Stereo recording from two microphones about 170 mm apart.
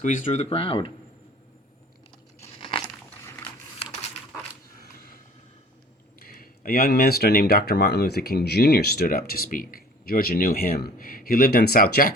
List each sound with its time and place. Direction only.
0.0 s speech: 45° left (ahead or behind)
2.6 s crunch: 30° left (ahead or behind)
6.2 s speech: 60° left (ahead or behind)